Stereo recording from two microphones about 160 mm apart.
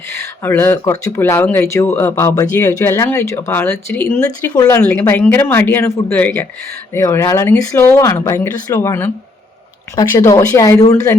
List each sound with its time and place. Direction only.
0.1 s speech: 15° left (ahead or behind)
4.5 s speech: 25° left (ahead or behind)
4.8 s speech: 15° left (ahead or behind)